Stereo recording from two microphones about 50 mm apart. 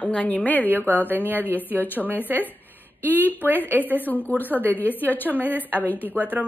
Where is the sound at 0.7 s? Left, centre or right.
Right.